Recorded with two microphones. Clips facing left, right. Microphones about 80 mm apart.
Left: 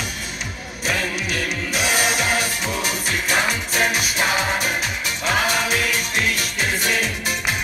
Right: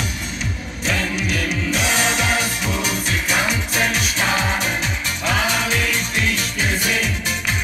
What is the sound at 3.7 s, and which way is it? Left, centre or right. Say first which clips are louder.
Music: even; centre.